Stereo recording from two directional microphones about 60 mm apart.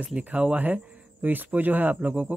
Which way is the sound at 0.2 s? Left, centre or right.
Centre.